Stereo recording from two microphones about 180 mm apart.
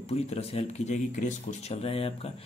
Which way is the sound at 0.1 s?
35° left (ahead or behind).